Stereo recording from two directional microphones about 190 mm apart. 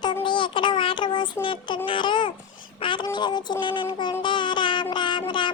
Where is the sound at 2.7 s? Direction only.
25° left (ahead or behind).